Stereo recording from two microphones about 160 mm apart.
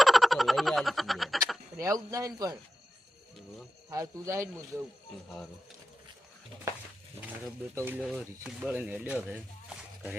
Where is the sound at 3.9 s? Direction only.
20° right (ahead or behind).